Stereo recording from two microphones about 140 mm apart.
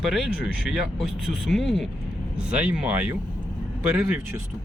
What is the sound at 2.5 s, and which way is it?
Speech, 10° right (ahead or behind).